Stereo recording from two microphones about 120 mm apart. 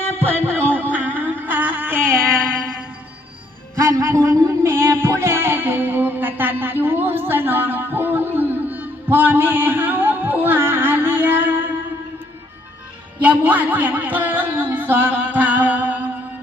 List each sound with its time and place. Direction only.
0.1 s music: 20° right (ahead or behind)
3.8 s music: 20° right (ahead or behind)
13.2 s a sound: 15° right (ahead or behind)